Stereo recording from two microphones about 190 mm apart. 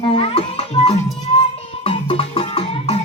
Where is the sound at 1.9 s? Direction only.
30° left (ahead or behind).